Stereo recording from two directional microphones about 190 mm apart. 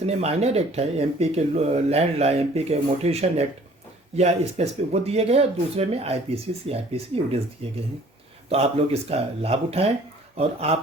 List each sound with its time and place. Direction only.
0.0 s speech: 35° right (ahead or behind)
8.4 s speech: 30° right (ahead or behind)